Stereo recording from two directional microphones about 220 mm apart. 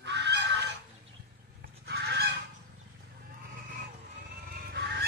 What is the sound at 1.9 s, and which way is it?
Fowl, 45° right (ahead or behind).